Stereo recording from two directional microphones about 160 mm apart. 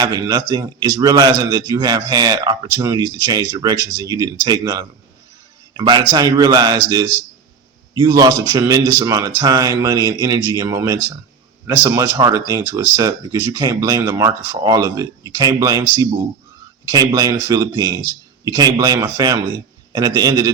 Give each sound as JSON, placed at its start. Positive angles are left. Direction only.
{"t": 0.0, "sound": "a man's voice", "side_deg": -25}